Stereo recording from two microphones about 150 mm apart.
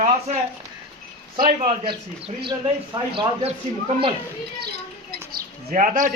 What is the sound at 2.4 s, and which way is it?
Speech, 35° right (ahead or behind).